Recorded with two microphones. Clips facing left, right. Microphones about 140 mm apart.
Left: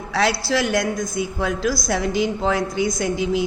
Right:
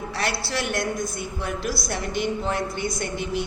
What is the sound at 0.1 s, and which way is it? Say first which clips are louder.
A man's voice: left 9 dB; 90° left.